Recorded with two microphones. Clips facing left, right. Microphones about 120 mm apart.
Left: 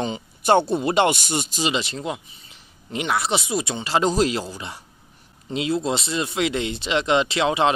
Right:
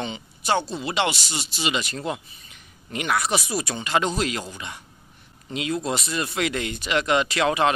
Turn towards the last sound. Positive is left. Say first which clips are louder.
# left 1 dB
turn(degrees=20)  # may be behind; listen again after turning